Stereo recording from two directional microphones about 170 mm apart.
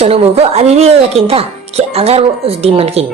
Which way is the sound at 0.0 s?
35° right (ahead or behind).